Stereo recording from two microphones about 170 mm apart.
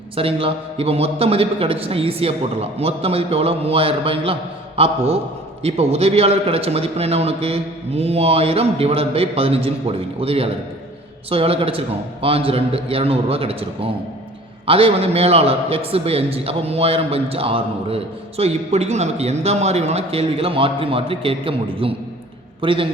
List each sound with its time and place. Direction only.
0.2 s a man's voice: 35° right (ahead or behind)